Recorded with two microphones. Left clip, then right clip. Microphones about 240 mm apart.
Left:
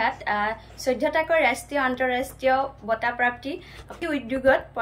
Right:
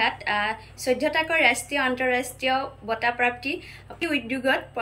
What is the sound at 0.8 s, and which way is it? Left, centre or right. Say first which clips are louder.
Speech: even; left.